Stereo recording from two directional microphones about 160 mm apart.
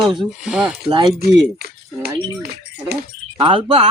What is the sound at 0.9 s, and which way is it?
Speech, 30° right (ahead or behind).